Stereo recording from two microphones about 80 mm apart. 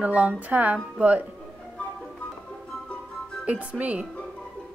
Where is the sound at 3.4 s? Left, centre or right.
Centre.